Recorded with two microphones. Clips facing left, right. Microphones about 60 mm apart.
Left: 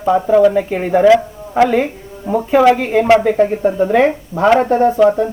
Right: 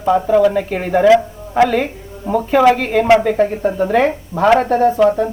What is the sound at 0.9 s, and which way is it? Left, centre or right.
Speech, centre.